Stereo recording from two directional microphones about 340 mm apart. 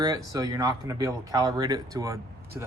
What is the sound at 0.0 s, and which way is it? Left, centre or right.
Speech, centre.